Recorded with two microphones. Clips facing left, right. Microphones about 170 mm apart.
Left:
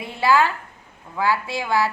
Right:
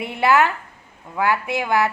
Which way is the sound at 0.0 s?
20° right (ahead or behind).